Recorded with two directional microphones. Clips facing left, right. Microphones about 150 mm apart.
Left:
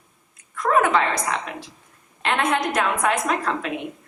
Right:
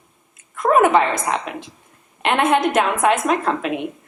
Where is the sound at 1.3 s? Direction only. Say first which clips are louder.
Right 4 dB; 20° right (ahead or behind).